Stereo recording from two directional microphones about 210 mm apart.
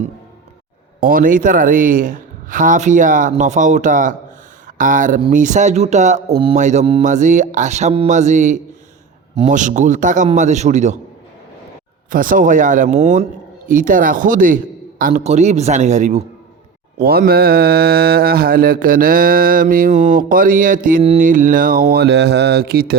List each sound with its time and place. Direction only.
1.0 s a man's voice: 40° right (ahead or behind)
12.1 s a man's voice: 40° right (ahead or behind)
17.0 s mantra: 45° right (ahead or behind)
22.0 s mantra: 55° right (ahead or behind)